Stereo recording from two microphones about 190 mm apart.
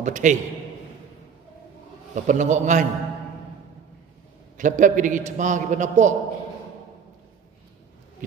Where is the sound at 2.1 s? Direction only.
40° right (ahead or behind).